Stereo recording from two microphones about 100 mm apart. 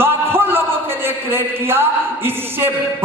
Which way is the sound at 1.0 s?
25° right (ahead or behind).